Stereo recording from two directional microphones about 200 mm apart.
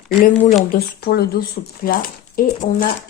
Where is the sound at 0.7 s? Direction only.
50° left (ahead or behind).